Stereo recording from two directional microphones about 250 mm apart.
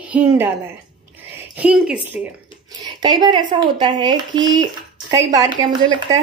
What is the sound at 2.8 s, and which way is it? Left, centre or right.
Speech, centre.